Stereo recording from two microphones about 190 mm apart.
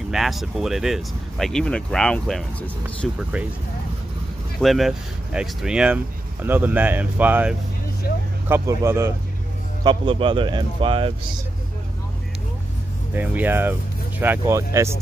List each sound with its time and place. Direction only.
0.1 s speech: centre (ahead or behind)
4.6 s speech: centre (ahead or behind)
9.8 s speech: 25° right (ahead or behind)
13.1 s speech: 10° right (ahead or behind)